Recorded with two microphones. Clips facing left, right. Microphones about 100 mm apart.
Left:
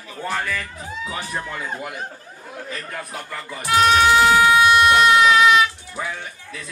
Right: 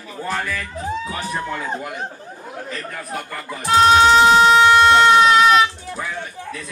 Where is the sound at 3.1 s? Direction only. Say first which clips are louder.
Right 3 dB; 55° right (ahead or behind).